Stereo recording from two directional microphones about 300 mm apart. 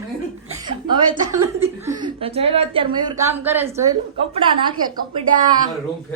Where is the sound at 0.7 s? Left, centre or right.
Centre.